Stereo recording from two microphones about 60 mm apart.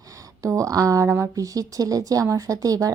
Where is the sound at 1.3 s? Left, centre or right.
Right.